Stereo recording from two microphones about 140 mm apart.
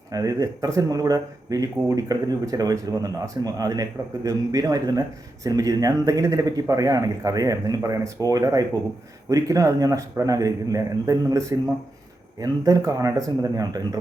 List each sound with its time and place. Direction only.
0.1 s speech: 25° right (ahead or behind)